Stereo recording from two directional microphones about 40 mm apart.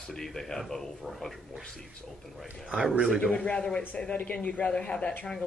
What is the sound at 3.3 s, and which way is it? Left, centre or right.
A man's voice, left.